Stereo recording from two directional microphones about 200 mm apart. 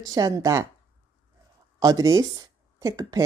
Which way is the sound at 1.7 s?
15° right (ahead or behind).